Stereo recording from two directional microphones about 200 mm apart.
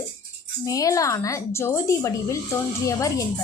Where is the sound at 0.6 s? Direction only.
15° left (ahead or behind).